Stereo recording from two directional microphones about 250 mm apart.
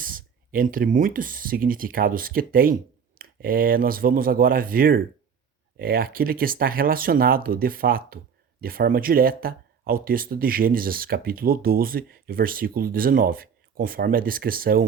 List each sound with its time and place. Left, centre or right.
0.0 s speech: right